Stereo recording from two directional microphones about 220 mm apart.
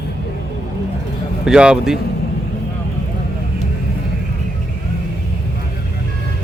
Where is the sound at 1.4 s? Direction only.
5° right (ahead or behind).